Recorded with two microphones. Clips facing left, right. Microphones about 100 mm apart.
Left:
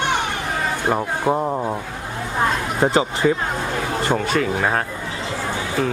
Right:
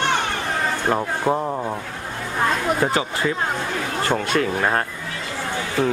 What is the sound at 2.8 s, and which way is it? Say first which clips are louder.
Speech: left 5 dB; 20° left (ahead or behind).